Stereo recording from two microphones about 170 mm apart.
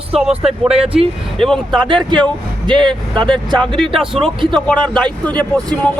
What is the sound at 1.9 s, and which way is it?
Speech, 25° right (ahead or behind).